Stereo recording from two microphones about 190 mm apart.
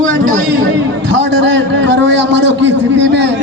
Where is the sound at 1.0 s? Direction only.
65° right (ahead or behind).